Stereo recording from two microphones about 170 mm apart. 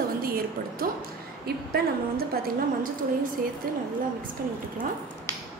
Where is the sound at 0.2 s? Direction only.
60° right (ahead or behind).